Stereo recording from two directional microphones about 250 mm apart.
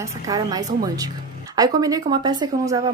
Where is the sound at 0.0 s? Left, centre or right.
Centre.